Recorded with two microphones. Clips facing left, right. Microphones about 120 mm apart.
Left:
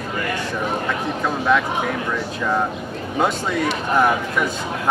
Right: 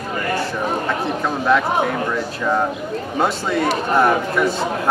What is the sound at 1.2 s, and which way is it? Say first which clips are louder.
Speech: right 1 dB; centre (ahead or behind).